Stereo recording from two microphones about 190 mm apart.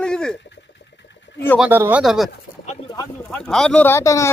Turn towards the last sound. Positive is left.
turn(degrees=15)  # may be behind; listen again after turning